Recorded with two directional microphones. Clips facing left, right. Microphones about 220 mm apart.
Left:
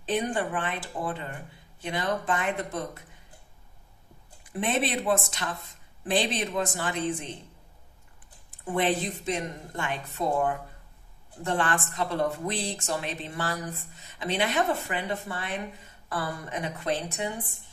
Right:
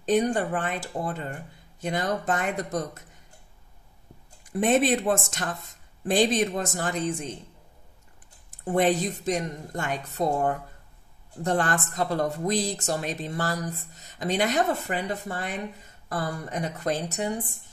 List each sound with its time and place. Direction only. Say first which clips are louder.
0.0 s speech: right 5 dB; 40° right (ahead or behind)
4.6 s speech: right 6 dB; 45° right (ahead or behind)
8.5 s speech: right 4 dB; 45° right (ahead or behind)